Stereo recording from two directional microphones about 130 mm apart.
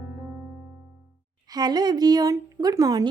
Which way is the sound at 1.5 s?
30° right (ahead or behind).